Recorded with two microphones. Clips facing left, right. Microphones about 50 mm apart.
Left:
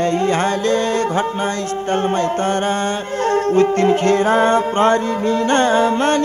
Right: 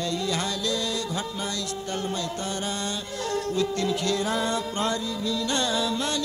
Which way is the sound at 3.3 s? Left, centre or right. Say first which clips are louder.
Left 12 dB; left.